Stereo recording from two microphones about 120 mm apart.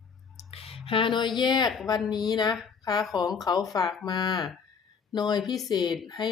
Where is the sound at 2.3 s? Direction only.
35° left (ahead or behind).